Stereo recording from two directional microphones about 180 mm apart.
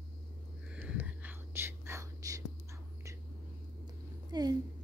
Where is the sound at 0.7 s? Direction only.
10° right (ahead or behind).